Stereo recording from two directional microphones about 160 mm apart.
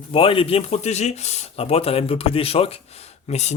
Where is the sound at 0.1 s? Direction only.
35° left (ahead or behind).